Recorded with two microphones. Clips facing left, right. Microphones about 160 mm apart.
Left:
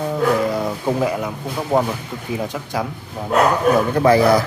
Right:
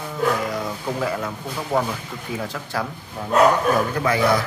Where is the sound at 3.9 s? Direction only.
35° left (ahead or behind).